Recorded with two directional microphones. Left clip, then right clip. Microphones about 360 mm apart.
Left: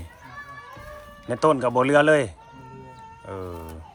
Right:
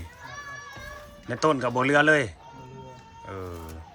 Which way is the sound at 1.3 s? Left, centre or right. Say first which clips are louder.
Left 4 dB; centre.